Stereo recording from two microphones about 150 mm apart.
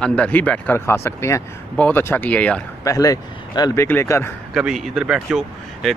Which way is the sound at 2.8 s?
25° left (ahead or behind).